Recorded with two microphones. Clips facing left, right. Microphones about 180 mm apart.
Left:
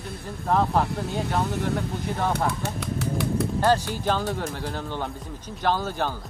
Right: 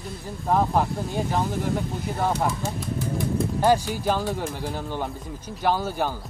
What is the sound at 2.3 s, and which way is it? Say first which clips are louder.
Speech: right 1 dB; 70° left (ahead or behind).